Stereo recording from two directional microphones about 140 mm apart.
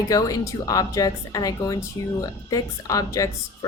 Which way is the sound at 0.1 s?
25° left (ahead or behind).